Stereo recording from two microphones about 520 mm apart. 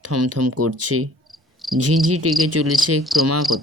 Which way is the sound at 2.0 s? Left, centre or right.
Right.